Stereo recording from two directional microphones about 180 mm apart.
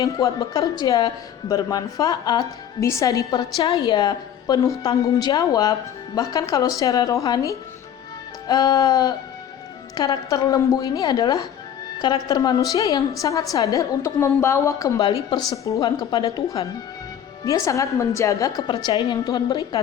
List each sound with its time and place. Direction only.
0.0 s a woman's voice: 20° left (ahead or behind)